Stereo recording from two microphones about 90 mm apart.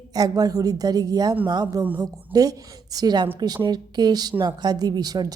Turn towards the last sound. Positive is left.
turn(degrees=-50)  # may be behind; listen again after turning